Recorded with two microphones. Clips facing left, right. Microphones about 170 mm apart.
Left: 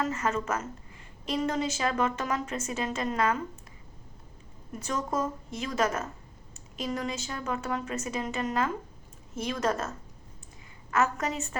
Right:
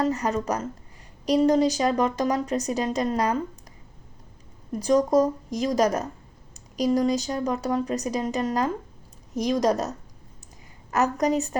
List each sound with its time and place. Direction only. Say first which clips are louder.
0.0 s a woman's voice: right 5 dB; 35° right (ahead or behind)
4.7 s a woman's voice: right 12 dB; 35° right (ahead or behind)
10.9 s a woman's voice: right 6 dB; 40° right (ahead or behind)